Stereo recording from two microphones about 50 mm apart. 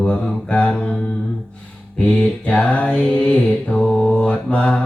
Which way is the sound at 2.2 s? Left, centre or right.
Left.